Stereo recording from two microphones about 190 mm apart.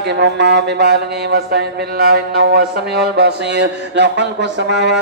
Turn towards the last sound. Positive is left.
turn(degrees=-65)  # may be behind; listen again after turning